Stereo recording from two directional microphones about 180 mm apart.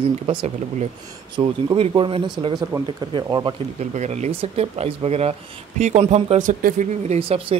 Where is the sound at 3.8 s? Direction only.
40° right (ahead or behind).